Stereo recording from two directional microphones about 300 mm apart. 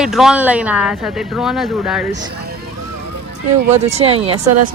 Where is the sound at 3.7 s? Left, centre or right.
Right.